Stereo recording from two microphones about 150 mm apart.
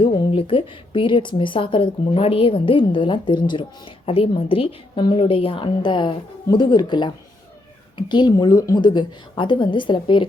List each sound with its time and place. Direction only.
0.0 s a woman's voice: 35° left (ahead or behind)